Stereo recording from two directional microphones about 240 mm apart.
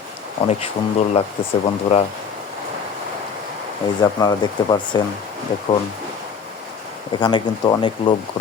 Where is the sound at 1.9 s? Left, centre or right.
Left.